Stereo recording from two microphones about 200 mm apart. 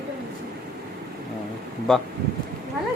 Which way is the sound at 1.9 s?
5° left (ahead or behind).